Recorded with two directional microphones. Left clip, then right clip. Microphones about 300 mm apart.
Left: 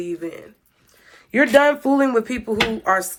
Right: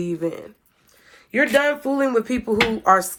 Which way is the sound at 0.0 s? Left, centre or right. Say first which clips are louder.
Right 3 dB; centre.